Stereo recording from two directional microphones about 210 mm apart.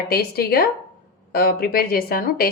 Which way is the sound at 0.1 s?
45° left (ahead or behind).